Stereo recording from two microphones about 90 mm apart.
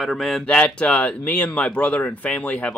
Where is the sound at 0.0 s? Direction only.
Centre (ahead or behind).